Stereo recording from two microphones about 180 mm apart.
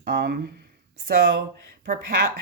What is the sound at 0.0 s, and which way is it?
Speech, 60° right (ahead or behind).